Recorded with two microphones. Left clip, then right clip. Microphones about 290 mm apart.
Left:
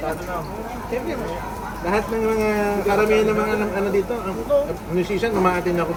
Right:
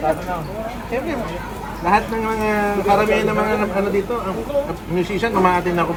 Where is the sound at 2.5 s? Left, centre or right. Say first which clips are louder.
Right 3 dB; centre.